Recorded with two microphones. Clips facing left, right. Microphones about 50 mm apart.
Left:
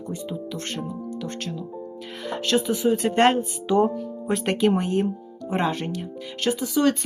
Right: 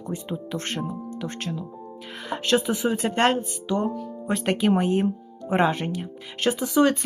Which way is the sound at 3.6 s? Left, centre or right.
Centre.